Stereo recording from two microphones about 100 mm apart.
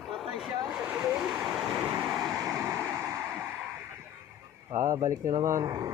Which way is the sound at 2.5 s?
25° right (ahead or behind).